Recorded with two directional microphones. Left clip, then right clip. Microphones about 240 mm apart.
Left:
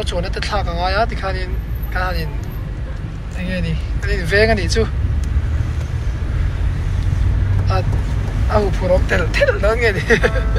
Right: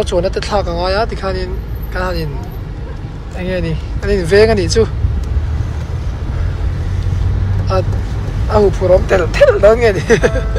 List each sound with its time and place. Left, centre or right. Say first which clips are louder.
0.0 s speech: right 8 dB; right
3.3 s speech: right 6 dB; right
8.5 s speech: right 6 dB; right